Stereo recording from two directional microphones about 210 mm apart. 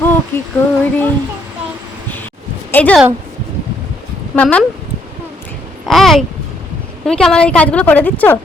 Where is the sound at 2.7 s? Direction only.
5° left (ahead or behind).